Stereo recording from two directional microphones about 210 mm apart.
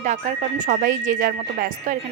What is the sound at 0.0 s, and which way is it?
A woman's voice, 35° right (ahead or behind).